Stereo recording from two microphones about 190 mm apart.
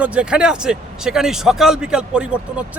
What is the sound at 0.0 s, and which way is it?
A man's voice, 5° right (ahead or behind).